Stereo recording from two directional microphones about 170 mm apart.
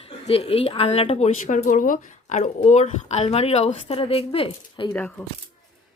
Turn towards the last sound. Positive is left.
turn(degrees=35)  # may be behind; listen again after turning